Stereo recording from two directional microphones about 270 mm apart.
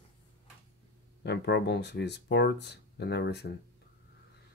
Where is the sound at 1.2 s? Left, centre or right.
Left.